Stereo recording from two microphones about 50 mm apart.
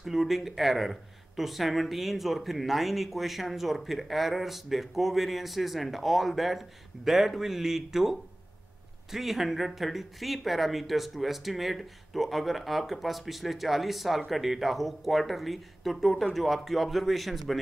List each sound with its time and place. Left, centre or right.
0.0 s speech: centre